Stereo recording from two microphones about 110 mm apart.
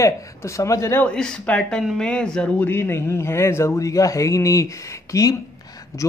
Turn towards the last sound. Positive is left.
turn(degrees=30)  # may be behind; listen again after turning